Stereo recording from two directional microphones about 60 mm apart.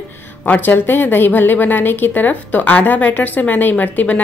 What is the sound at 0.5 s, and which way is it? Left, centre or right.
A woman's voice, left.